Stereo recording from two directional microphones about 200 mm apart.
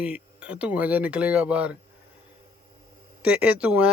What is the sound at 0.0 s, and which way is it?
Speech, 5° right (ahead or behind).